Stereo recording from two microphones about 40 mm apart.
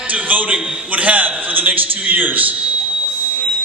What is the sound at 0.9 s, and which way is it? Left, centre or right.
A man's voice, right.